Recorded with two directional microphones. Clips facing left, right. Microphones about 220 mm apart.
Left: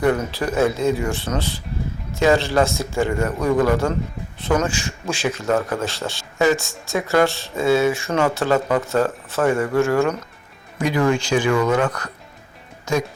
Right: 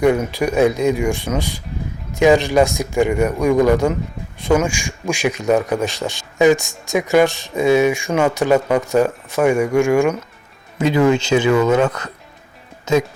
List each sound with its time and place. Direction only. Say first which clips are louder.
0.0 s speech: right 4 dB; 15° right (ahead or behind)
10.8 s speech: right 4 dB; 25° right (ahead or behind)
12.8 s music: right 5 dB; 20° right (ahead or behind)